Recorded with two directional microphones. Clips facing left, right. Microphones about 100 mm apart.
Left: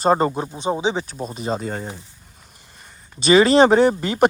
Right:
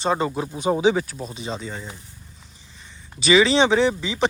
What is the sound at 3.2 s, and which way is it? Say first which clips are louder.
Speech: left 4 dB; 40° left (ahead or behind).